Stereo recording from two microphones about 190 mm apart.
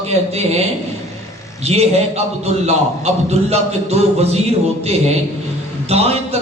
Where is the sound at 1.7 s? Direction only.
35° right (ahead or behind).